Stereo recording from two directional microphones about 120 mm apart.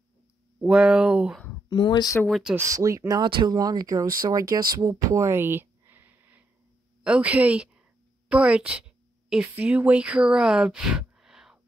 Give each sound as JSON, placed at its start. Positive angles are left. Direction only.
{"t": 0.6, "sound": "speech", "side_deg": -5}
{"t": 1.7, "sound": "speech", "side_deg": 35}
{"t": 2.2, "sound": "speech", "side_deg": 0}
{"t": 2.5, "sound": "speech", "side_deg": -25}
{"t": 3.3, "sound": "a woman's voice", "side_deg": -40}